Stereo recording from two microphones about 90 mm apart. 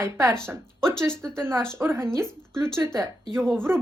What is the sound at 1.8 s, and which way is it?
Speech, 25° right (ahead or behind).